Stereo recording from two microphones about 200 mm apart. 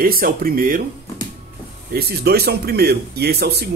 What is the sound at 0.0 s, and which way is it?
Speech, 45° right (ahead or behind).